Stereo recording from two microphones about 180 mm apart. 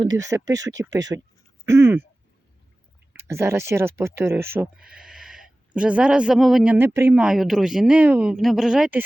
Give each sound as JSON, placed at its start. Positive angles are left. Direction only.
{"t": 0.2, "sound": "speech", "side_deg": -20}
{"t": 3.1, "sound": "speech", "side_deg": -15}